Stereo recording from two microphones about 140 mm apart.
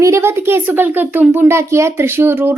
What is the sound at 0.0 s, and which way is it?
A woman's voice, 20° right (ahead or behind).